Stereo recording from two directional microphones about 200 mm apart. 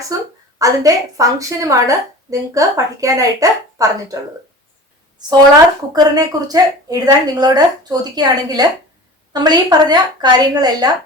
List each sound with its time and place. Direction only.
0.1 s a woman's voice: 15° right (ahead or behind)
5.9 s a woman's voice: 20° right (ahead or behind)